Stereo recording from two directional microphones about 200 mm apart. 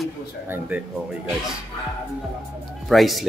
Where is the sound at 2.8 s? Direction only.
Centre (ahead or behind).